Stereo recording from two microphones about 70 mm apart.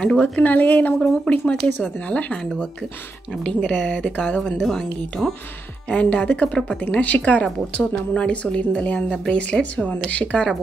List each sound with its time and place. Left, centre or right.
0.0 s a woman's voice: centre
4.6 s speech: centre
5.9 s a woman's voice: centre